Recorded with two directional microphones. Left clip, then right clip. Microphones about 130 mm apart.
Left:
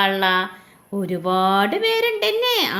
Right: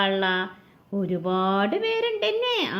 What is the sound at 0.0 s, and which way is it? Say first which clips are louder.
Speech: left 5 dB; 25° left (ahead or behind).